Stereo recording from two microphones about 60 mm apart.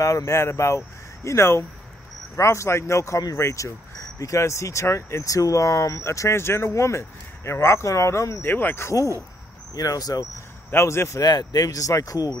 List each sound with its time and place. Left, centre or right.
0.0 s speech: left
3.5 s speech: left
8.4 s speech: left
8.8 s speech: left
9.8 s speech: left
10.7 s speech: left
11.1 s speech: left